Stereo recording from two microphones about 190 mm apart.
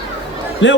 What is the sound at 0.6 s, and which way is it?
Speech, 75° left (ahead or behind).